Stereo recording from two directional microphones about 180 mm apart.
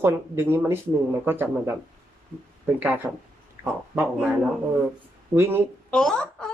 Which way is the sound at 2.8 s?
10° right (ahead or behind).